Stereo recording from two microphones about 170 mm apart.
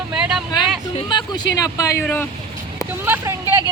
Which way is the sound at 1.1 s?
25° left (ahead or behind).